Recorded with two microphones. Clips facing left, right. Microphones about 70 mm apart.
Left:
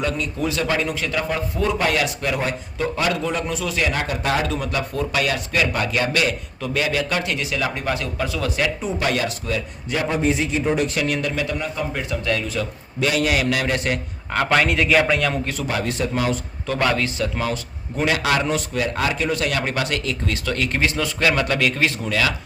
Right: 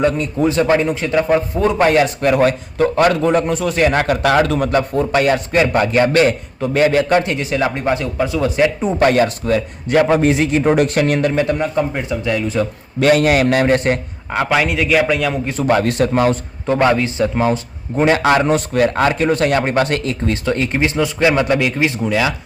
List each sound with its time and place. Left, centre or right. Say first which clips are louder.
0.0 s a man's voice: right 8 dB; right
4.7 s a man's voice: right 8 dB; right
8.8 s a man's voice: right 9 dB; right
10.0 s a man's voice: right 7 dB; right
11.9 s speech: right 4 dB; right
13.0 s a man's voice: right 8 dB; right
14.3 s a man's voice: right 2 dB; centre
15.5 s a man's voice: right 9 dB; right
16.6 s a man's voice: right 7 dB; right